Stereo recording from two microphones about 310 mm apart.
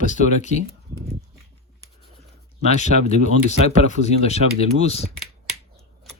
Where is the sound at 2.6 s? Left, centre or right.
Left.